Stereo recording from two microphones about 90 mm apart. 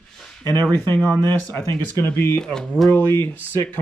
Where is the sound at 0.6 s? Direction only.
25° left (ahead or behind).